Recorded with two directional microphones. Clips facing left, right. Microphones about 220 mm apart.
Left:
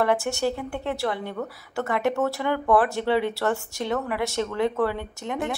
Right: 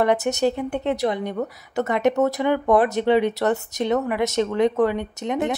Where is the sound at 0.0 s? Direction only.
20° right (ahead or behind).